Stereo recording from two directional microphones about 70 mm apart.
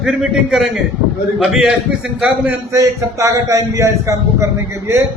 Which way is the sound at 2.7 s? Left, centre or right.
Right.